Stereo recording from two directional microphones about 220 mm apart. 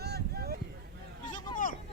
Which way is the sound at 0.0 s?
45° right (ahead or behind).